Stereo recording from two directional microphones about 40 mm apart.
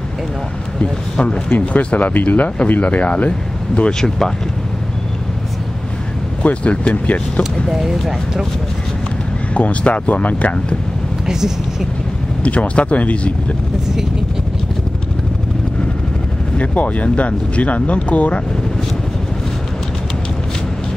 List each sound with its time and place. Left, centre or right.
0.7 s speech: left
1.7 s speech: left
6.4 s speech: left
7.7 s speech: centre
9.5 s speech: left
11.2 s speech: centre
12.4 s speech: left
16.5 s speech: left